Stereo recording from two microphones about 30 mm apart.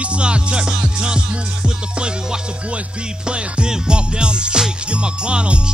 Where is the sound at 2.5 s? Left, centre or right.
Right.